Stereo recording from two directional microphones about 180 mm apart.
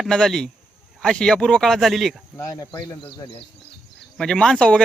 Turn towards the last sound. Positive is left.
turn(degrees=5)  # may be behind; listen again after turning